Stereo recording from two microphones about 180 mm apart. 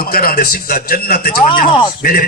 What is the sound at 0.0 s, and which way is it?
A man's voice, 55° left (ahead or behind).